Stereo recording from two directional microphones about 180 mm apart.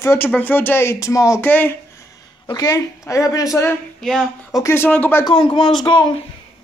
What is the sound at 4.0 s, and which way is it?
Speech, centre (ahead or behind).